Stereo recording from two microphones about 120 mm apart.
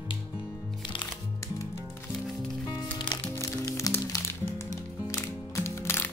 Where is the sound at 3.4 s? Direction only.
25° left (ahead or behind).